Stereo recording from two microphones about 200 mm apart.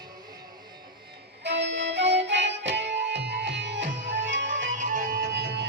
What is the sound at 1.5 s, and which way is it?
Music, 65° right (ahead or behind).